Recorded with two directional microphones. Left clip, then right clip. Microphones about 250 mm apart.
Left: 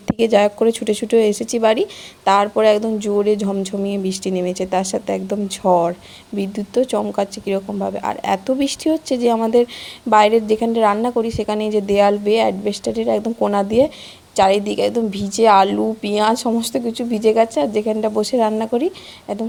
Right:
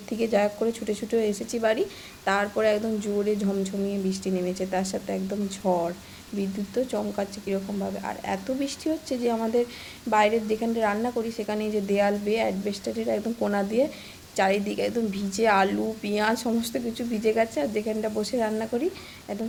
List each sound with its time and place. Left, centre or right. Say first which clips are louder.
0.2 s a woman's voice: left 10 dB; left